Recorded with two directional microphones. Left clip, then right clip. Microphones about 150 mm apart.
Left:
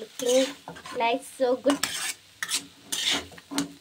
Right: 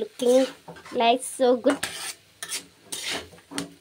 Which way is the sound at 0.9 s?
45° right (ahead or behind).